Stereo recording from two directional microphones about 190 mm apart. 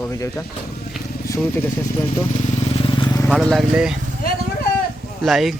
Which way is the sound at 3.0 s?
20° left (ahead or behind).